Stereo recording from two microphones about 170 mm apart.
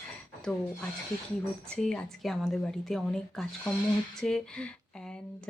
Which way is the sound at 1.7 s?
Centre (ahead or behind).